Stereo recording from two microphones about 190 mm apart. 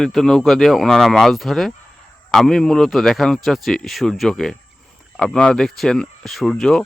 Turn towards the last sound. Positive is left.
turn(degrees=0)  # may be behind; listen again after turning